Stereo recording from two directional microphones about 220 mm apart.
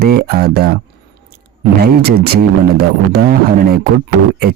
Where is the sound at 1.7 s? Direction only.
45° right (ahead or behind).